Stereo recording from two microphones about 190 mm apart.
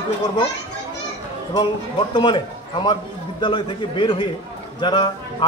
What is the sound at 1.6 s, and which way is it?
A man's voice, 25° left (ahead or behind).